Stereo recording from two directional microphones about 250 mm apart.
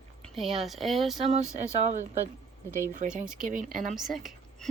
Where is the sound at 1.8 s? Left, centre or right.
Right.